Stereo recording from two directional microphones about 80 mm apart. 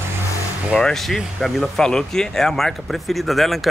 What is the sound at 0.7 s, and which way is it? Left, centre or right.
Speech, centre.